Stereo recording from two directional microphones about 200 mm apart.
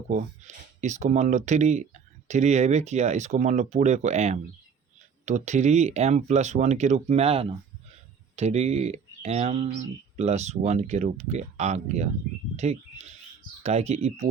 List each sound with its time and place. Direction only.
0.1 s speech: 35° right (ahead or behind)